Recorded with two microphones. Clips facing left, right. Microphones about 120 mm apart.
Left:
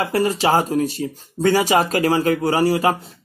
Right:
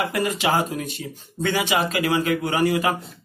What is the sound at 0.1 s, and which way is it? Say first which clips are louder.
Speech: left 5 dB; 35° left (ahead or behind).